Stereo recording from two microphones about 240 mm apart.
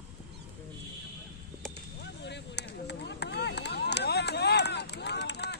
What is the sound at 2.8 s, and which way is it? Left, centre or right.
Chop, left.